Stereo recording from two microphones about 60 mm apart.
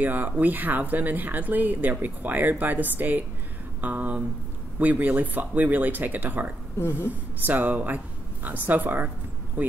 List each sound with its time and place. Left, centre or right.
0.0 s speech: right
6.8 s a woman's voice: left
7.1 s speech: right